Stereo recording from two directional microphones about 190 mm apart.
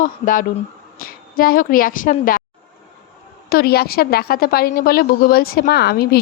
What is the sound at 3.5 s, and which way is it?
A woman's voice, 55° left (ahead or behind).